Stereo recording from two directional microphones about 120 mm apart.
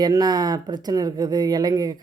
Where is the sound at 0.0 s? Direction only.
35° right (ahead or behind).